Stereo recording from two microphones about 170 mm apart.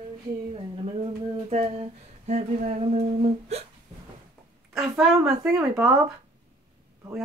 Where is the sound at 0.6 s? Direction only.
30° right (ahead or behind).